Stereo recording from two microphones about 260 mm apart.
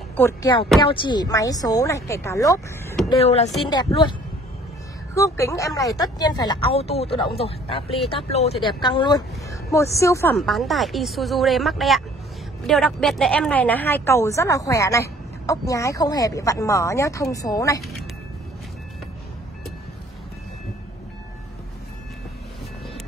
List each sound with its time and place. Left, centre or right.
0.1 s a woman's voice: centre
3.2 s a woman's voice: left
5.1 s a woman's voice: centre
10.4 s a woman's voice: centre